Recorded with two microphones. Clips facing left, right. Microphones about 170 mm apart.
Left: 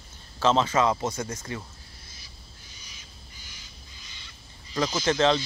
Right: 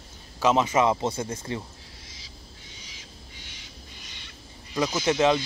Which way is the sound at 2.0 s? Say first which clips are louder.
Right 4 dB; 90° right.